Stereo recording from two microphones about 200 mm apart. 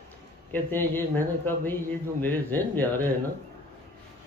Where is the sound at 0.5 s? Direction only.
10° left (ahead or behind).